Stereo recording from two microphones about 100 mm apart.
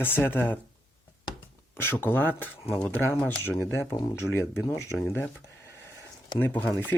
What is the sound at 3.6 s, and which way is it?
Speech, 25° left (ahead or behind).